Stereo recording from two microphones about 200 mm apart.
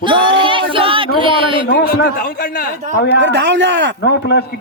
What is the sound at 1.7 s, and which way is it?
Speech, 50° left (ahead or behind).